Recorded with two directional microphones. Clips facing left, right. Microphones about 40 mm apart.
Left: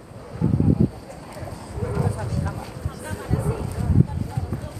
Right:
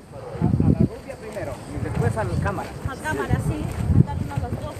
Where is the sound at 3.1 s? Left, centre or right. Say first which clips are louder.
Right 4 dB; right.